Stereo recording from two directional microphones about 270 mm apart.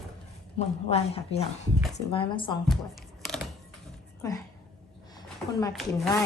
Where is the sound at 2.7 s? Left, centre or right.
Centre.